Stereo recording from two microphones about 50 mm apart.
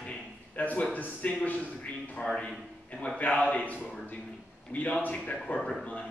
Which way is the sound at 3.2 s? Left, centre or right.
Left.